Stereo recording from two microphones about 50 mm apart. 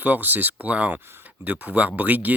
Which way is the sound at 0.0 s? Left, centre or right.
Right.